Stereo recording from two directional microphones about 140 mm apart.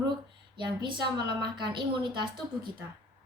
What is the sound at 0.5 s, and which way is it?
A woman's voice, 35° right (ahead or behind).